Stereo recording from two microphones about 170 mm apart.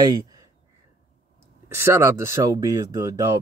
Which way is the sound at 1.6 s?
15° right (ahead or behind).